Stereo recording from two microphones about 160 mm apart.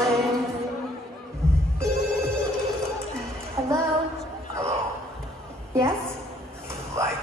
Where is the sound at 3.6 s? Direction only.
25° right (ahead or behind).